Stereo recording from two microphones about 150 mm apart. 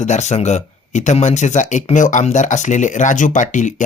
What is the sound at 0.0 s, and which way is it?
Speech, 50° left (ahead or behind).